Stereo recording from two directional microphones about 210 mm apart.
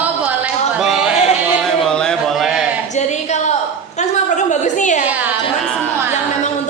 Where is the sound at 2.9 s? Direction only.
35° left (ahead or behind).